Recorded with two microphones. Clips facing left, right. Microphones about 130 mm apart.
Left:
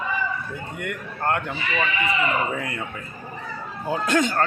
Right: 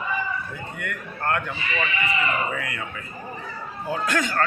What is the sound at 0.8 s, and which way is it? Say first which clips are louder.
Speech: left 2 dB; 25° left (ahead or behind).